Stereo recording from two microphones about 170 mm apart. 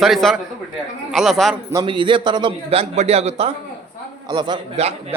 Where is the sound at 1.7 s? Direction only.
30° right (ahead or behind).